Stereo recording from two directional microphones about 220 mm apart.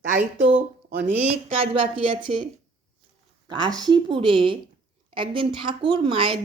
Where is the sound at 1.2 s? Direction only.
30° right (ahead or behind).